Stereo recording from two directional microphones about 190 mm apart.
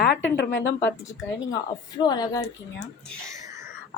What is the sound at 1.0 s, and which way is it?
A woman's voice, 20° left (ahead or behind).